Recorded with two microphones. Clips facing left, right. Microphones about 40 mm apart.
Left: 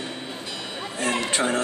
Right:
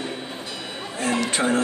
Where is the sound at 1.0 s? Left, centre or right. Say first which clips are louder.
Right 2 dB; left.